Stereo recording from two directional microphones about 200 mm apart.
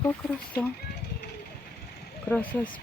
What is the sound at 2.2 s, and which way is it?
Speech, 10° left (ahead or behind).